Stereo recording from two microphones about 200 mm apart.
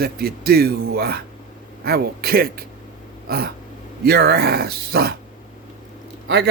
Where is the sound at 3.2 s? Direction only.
50° right (ahead or behind).